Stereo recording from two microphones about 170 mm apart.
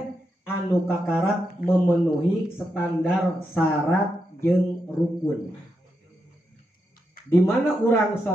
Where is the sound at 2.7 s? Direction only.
Centre (ahead or behind).